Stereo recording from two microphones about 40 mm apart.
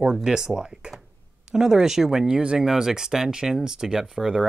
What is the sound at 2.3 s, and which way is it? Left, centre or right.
Speech, right.